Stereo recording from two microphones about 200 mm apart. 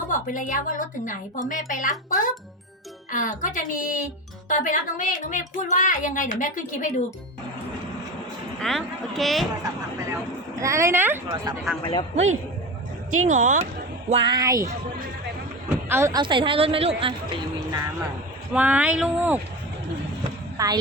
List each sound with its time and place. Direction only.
0.1 s speech: 40° left (ahead or behind)
8.6 s speech: centre (ahead or behind)
10.1 s speech: 15° right (ahead or behind)
11.6 s speech: 5° left (ahead or behind)
12.1 s speech: 35° right (ahead or behind)
14.1 s a woman's voice: 25° right (ahead or behind)
15.9 s a woman's voice: 15° right (ahead or behind)
18.5 s speech: 5° right (ahead or behind)
20.6 s speech: 15° right (ahead or behind)